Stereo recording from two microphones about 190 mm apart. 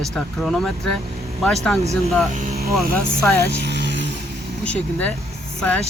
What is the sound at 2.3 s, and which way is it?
Speech, 40° right (ahead or behind).